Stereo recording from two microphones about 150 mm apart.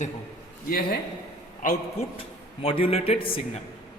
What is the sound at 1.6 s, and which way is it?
Speech, 60° left (ahead or behind).